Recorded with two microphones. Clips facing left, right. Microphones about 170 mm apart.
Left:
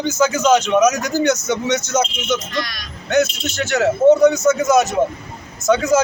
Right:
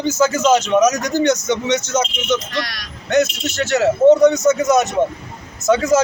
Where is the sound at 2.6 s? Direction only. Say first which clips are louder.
Even; 75° right (ahead or behind).